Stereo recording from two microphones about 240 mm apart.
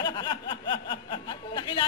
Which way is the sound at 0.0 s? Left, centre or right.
Centre.